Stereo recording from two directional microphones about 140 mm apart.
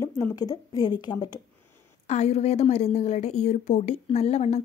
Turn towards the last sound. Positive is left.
turn(degrees=50)  # may be behind; listen again after turning